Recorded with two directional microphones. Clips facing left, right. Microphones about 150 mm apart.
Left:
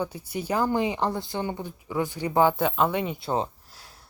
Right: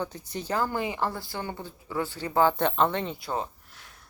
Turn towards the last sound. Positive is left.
turn(degrees=35)  # may be behind; listen again after turning